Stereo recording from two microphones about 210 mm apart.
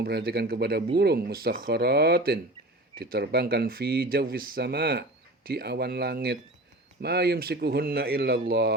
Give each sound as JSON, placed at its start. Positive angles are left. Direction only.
{"t": 0.0, "sound": "speech", "side_deg": -50}